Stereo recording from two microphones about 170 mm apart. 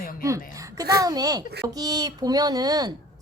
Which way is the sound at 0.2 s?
15° right (ahead or behind).